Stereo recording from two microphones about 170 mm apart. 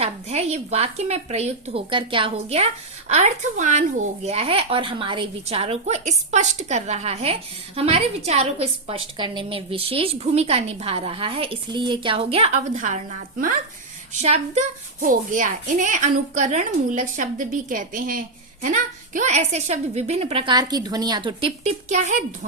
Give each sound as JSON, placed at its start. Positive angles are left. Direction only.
{"t": 0.0, "sound": "speech", "side_deg": -40}
{"t": 14.1, "sound": "speech", "side_deg": -40}
{"t": 15.0, "sound": "a woman's voice", "side_deg": -50}
{"t": 21.7, "sound": "a woman's voice", "side_deg": -45}